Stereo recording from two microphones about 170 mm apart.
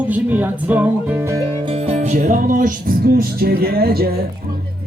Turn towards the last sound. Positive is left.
turn(degrees=-65)  # may be behind; listen again after turning